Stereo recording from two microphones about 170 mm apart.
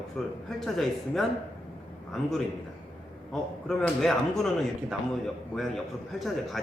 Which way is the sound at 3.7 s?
5° left (ahead or behind).